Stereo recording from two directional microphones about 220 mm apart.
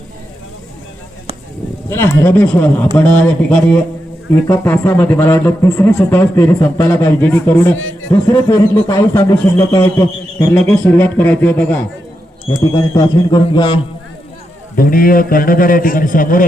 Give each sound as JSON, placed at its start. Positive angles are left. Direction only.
{"t": 1.9, "sound": "speech", "side_deg": 10}
{"t": 7.8, "sound": "a man's voice", "side_deg": 60}
{"t": 8.1, "sound": "speech", "side_deg": 15}
{"t": 13.0, "sound": "a man's voice", "side_deg": 20}
{"t": 14.8, "sound": "a man's voice", "side_deg": 40}